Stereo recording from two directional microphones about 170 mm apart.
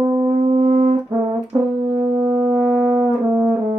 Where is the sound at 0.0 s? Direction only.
20° right (ahead or behind).